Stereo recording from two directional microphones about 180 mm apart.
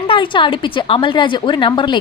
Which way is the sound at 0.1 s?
25° left (ahead or behind).